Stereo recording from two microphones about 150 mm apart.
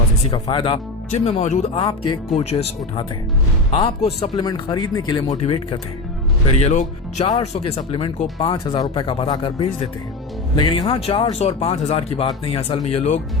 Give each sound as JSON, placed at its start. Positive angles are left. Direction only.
{"t": 0.3, "sound": "speech", "side_deg": 35}
{"t": 1.8, "sound": "speech", "side_deg": 30}
{"t": 2.3, "sound": "speech", "side_deg": 45}
{"t": 4.4, "sound": "speech", "side_deg": 30}
{"t": 6.6, "sound": "speech", "side_deg": 50}